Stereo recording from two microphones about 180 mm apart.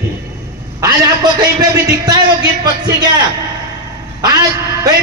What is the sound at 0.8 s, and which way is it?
A man's voice, 20° right (ahead or behind).